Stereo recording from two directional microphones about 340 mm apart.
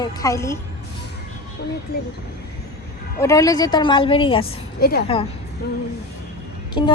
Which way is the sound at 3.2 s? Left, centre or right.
Centre.